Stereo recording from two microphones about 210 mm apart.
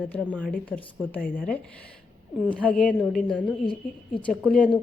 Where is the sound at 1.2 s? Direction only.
40° left (ahead or behind).